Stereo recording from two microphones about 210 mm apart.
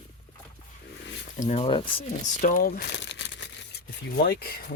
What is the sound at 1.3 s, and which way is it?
Speech, 35° left (ahead or behind).